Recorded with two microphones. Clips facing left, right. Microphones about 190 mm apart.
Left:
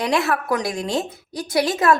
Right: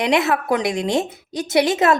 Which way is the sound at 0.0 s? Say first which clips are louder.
Right 3 dB; 20° right (ahead or behind).